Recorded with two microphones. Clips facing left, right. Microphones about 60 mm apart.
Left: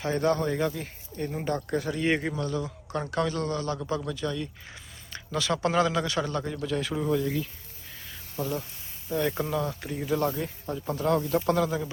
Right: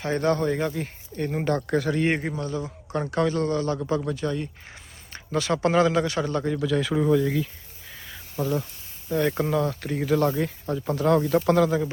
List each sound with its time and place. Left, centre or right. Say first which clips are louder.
0.0 s speech: right 2 dB; right
1.2 s speech: right 5 dB; right
2.2 s a man's voice: right 1 dB; right
6.5 s speech: right 6 dB; right
8.4 s speech: right 5 dB; centre
9.0 s speech: right 4 dB; right
10.9 s speech: right 5 dB; right